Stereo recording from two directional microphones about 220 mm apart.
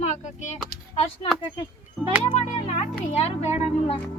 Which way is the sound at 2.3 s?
30° left (ahead or behind).